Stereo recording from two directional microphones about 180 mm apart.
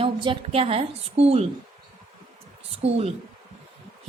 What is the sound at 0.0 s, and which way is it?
A woman's voice, 30° right (ahead or behind).